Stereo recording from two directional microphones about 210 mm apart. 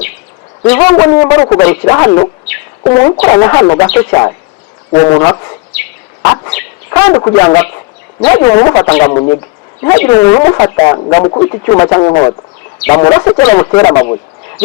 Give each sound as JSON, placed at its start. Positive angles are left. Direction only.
{"t": 0.7, "sound": "speech", "side_deg": 15}
{"t": 6.2, "sound": "bow-wow", "side_deg": 20}
{"t": 7.4, "sound": "speech", "side_deg": 15}